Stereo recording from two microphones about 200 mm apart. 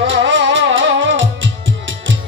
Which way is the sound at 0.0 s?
65° right (ahead or behind).